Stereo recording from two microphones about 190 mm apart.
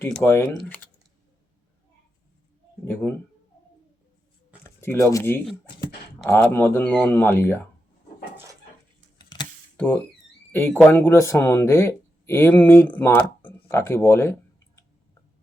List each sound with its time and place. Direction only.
0.0 s speech: 10° left (ahead or behind)
0.5 s speech: centre (ahead or behind)
2.8 s a sound: 10° left (ahead or behind)
4.6 s speech: 15° left (ahead or behind)
9.1 s a sound: 25° left (ahead or behind)
9.7 s speech: 5° left (ahead or behind)